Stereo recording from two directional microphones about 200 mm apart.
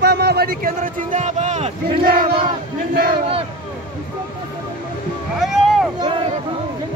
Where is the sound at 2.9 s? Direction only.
50° right (ahead or behind).